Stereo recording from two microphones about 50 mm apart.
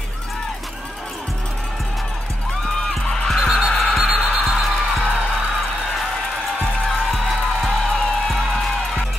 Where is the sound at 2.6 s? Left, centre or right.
Centre.